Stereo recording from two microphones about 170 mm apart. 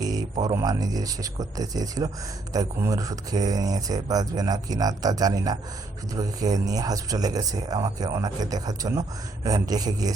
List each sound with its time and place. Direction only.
0.0 s a man's voice: 20° right (ahead or behind)